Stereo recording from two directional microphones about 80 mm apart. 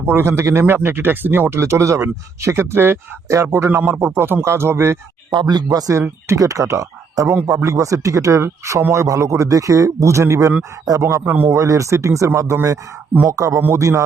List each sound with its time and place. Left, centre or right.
0.0 s speech: right
3.7 s speech: right
5.3 s speech: right
6.0 s speech: right
11.0 s speech: right
11.5 s speech: right